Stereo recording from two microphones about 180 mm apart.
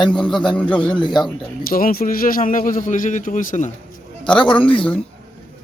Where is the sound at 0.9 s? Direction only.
25° left (ahead or behind).